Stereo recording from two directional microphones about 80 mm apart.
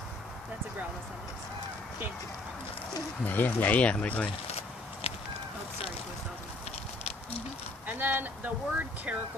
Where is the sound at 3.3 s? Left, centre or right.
Left.